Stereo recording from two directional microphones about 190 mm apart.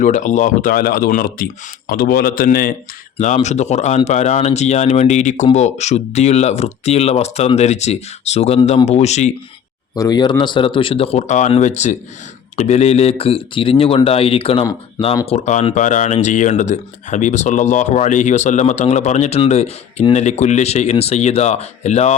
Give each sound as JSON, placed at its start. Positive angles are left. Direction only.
{"t": 0.0, "sound": "speech", "side_deg": 40}
{"t": 3.2, "sound": "speech", "side_deg": 40}
{"t": 9.9, "sound": "speech", "side_deg": 20}